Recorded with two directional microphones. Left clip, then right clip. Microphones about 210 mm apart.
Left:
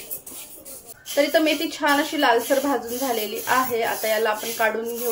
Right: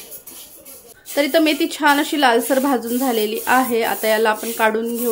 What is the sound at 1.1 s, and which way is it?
Speech, 50° right (ahead or behind).